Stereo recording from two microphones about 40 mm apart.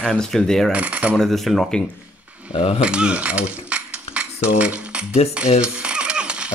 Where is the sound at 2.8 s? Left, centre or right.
Right.